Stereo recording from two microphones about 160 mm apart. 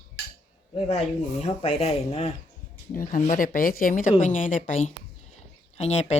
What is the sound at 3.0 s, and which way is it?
A woman's voice, 55° left (ahead or behind).